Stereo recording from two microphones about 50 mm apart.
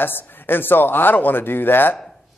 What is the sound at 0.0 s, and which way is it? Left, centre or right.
A man's voice, left.